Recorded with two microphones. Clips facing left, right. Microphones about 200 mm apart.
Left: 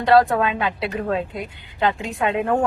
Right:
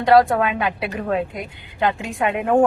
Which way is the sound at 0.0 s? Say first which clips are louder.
Right 1 dB; 15° right (ahead or behind).